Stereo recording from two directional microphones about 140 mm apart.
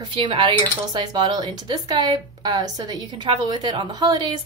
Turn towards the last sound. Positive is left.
turn(degrees=-30)  # may be behind; listen again after turning